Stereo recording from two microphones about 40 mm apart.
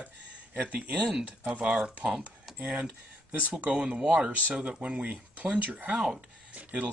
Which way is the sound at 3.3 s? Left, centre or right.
Right.